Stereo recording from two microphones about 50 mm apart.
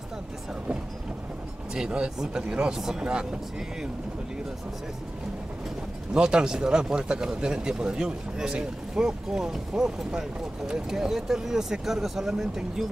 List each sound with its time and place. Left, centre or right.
1.7 s speech: centre
6.1 s speech: centre